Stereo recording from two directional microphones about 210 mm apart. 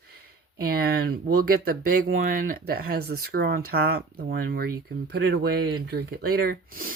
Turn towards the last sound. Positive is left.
turn(degrees=-45)  # may be behind; listen again after turning